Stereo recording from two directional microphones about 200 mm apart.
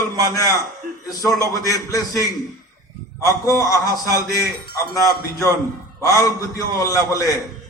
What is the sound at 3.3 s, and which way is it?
A man's voice, 15° left (ahead or behind).